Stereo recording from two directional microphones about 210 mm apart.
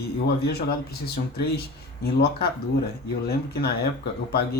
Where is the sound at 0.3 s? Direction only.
50° left (ahead or behind).